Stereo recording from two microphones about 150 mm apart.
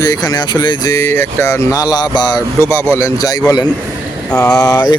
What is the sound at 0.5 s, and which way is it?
Speech, 25° left (ahead or behind).